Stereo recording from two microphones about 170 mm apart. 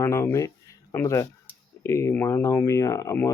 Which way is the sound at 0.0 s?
15° left (ahead or behind).